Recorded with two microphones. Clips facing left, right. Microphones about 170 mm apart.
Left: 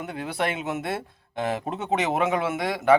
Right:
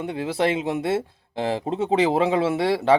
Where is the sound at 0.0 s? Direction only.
30° right (ahead or behind).